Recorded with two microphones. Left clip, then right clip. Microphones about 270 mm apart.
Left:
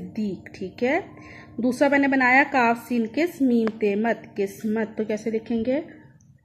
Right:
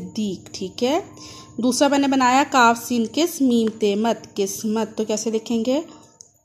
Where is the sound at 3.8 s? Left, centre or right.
Right.